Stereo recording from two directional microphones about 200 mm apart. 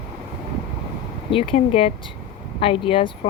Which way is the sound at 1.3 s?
25° left (ahead or behind).